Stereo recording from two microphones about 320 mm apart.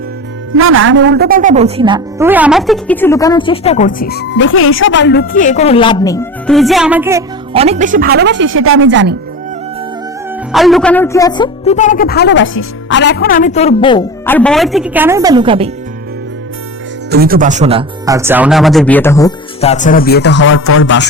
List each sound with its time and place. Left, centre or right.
0.5 s a woman's voice: right
10.5 s a woman's voice: centre
17.1 s speech: right; by 19.7 s centre
19.7 s speech: left